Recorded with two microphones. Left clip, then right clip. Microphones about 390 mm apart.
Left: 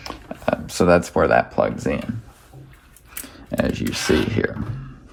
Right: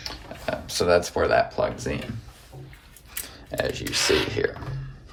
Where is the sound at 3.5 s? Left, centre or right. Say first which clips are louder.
Left 3 dB; centre.